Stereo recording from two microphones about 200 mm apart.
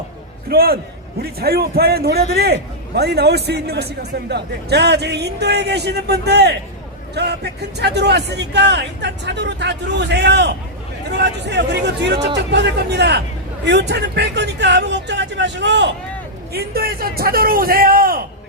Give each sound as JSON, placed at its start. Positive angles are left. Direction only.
{"t": 0.4, "sound": "a man's voice", "side_deg": -50}
{"t": 16.5, "sound": "a man's voice", "side_deg": -50}